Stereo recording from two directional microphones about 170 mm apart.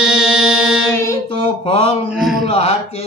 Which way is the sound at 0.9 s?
15° left (ahead or behind).